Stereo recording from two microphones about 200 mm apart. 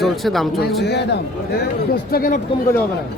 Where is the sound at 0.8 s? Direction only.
55° left (ahead or behind).